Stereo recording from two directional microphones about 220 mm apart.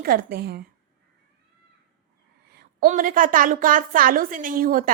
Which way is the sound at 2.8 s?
35° right (ahead or behind).